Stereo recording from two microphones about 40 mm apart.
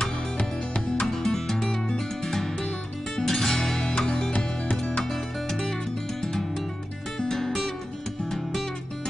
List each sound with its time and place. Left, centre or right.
0.0 s music: left
1.0 s music: centre
7.2 s music: centre